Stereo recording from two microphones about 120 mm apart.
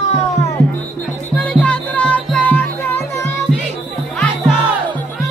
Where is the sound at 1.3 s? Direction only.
10° left (ahead or behind).